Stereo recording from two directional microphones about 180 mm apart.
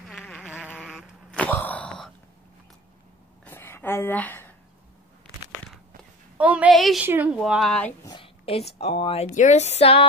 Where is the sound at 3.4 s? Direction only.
10° left (ahead or behind).